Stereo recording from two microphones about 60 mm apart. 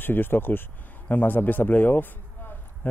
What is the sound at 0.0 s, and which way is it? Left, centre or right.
Speech, left.